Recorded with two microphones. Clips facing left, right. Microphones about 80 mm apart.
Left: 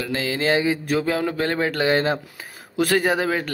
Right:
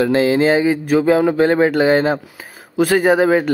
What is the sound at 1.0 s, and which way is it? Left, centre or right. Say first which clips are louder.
Speech: right 9 dB; centre.